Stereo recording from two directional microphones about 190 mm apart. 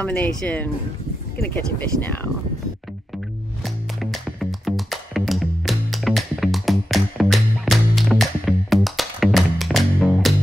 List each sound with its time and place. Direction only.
0.0 s speech: 5° left (ahead or behind)
3.6 s music: centre (ahead or behind)